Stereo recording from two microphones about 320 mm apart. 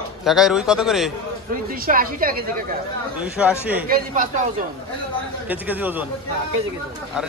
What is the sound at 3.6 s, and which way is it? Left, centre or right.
Speech, centre.